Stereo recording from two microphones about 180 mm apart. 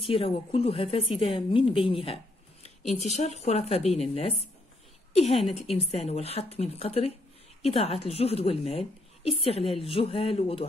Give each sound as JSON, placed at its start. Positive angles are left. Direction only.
{"t": 0.1, "sound": "a woman's voice", "side_deg": 30}